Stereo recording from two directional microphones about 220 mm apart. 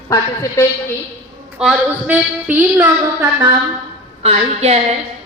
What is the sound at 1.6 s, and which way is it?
A man's voice, 5° right (ahead or behind).